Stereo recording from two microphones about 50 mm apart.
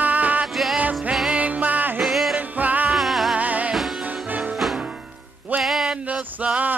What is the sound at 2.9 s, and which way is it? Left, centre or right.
Music, centre.